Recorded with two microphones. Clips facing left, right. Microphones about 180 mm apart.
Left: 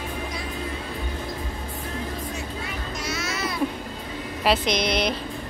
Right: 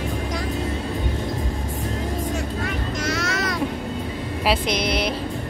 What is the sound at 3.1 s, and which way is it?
Music, 85° right.